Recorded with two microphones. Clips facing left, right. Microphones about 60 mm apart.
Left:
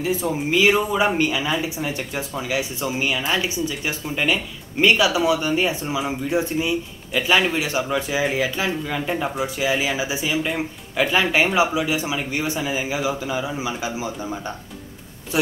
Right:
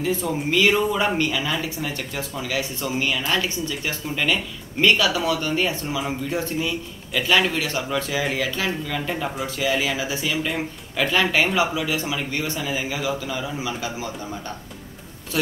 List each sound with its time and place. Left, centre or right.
0.0 s speech: centre